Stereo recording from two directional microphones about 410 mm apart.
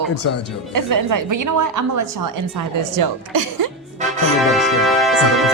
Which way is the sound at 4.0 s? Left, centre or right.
Centre.